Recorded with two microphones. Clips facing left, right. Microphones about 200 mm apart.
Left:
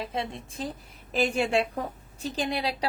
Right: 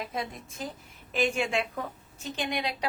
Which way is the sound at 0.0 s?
30° left (ahead or behind).